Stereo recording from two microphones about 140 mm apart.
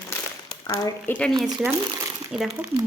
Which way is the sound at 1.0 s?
10° left (ahead or behind).